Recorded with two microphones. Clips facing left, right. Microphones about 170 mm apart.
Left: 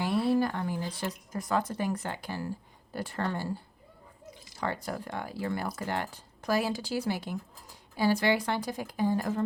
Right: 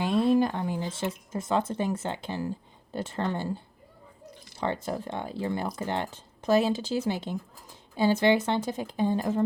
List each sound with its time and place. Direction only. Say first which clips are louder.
0.0 s speech: right 3 dB; 20° right (ahead or behind)